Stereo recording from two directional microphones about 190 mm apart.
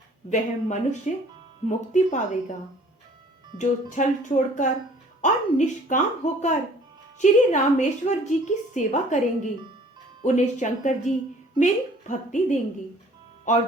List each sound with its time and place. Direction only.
0.3 s speech: 40° left (ahead or behind)
3.6 s speech: 40° left (ahead or behind)